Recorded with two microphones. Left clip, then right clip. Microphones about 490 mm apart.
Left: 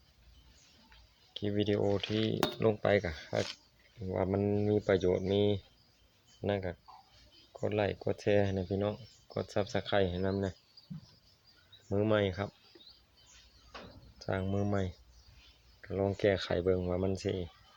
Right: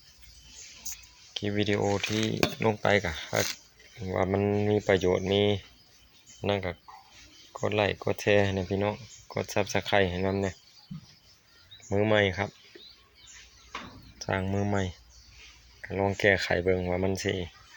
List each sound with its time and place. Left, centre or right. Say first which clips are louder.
1.3 s speech: right 4 dB; left
11.9 s speech: right 6 dB; left
14.3 s speech: right 5 dB; left